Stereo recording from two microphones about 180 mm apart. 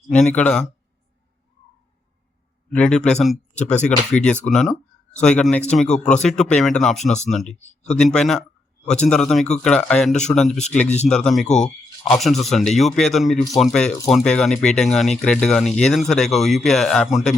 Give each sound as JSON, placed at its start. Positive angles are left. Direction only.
{"t": 0.1, "sound": "speech", "side_deg": 5}
{"t": 2.7, "sound": "speech", "side_deg": 5}
{"t": 7.0, "sound": "speech", "side_deg": 40}
{"t": 7.3, "sound": "speech", "side_deg": 0}
{"t": 10.8, "sound": "speech", "side_deg": 40}
{"t": 11.1, "sound": "speech", "side_deg": 5}